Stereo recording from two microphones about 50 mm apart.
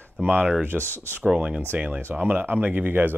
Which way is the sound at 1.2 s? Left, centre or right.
Right.